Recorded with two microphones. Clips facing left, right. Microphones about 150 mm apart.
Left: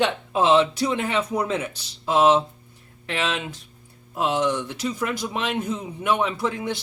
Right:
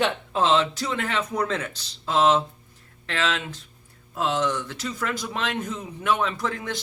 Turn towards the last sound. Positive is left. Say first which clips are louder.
# left 3 dB
turn(degrees=10)  # may be behind; listen again after turning